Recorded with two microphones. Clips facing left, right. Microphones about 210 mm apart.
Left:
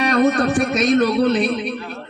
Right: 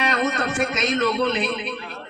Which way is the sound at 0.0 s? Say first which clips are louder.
Left 7 dB; 40° left (ahead or behind).